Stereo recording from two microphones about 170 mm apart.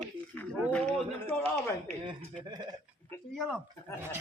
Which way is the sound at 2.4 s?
25° right (ahead or behind).